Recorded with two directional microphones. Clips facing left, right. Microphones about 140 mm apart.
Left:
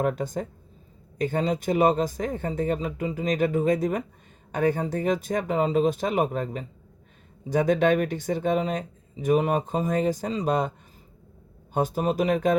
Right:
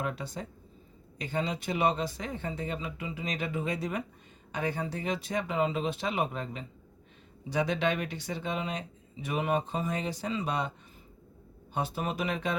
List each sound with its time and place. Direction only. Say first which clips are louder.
0.0 s speech: left 9 dB; 45° left (ahead or behind)
11.7 s speech: left 8 dB; 45° left (ahead or behind)